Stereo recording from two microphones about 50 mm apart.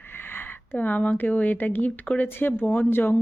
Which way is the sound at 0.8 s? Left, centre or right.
Left.